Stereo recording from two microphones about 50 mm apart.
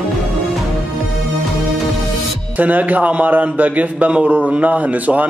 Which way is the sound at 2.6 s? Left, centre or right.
Right.